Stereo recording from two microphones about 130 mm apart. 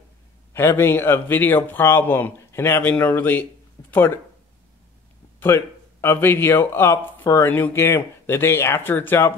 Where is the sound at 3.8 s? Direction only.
25° left (ahead or behind).